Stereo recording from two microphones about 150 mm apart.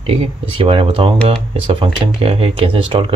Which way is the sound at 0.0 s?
40° right (ahead or behind).